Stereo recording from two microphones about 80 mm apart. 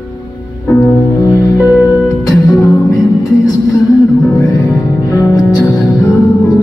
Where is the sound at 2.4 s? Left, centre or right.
Left.